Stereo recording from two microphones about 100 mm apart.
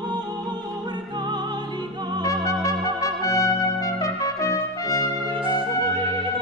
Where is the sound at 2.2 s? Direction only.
35° left (ahead or behind).